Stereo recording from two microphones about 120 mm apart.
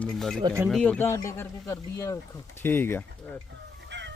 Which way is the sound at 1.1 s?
20° left (ahead or behind).